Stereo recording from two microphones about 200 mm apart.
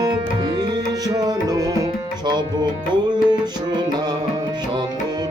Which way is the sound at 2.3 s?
20° right (ahead or behind).